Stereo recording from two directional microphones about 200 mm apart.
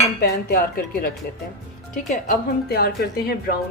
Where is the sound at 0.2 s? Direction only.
50° left (ahead or behind).